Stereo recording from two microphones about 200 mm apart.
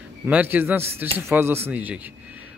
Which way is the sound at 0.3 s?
10° right (ahead or behind).